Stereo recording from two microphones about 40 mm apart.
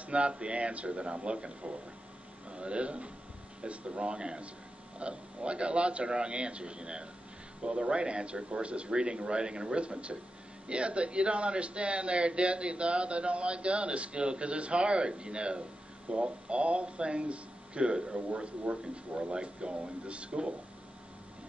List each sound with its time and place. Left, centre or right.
0.0 s speech: right